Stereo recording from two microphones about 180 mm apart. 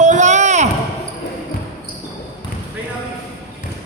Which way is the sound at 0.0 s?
40° right (ahead or behind).